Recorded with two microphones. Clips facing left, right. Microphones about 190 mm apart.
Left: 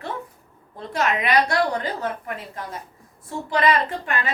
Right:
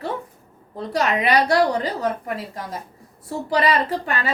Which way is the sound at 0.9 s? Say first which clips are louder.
Right 2 dB; 35° right (ahead or behind).